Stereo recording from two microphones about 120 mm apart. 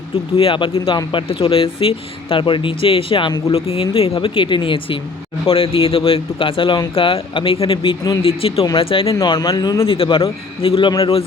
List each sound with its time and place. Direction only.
0.3 s speech: 45° left (ahead or behind)
9.1 s speech: 35° left (ahead or behind)
9.8 s speech: 50° left (ahead or behind)